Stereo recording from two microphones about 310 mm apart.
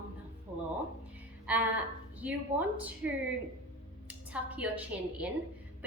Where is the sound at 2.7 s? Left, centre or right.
Centre.